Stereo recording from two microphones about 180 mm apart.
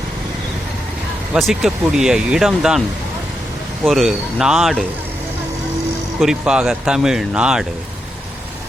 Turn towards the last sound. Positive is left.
turn(degrees=-5)  # may be behind; listen again after turning